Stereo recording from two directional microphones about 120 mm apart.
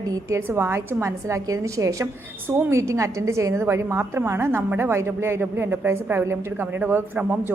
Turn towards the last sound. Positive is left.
turn(degrees=-15)  # may be behind; listen again after turning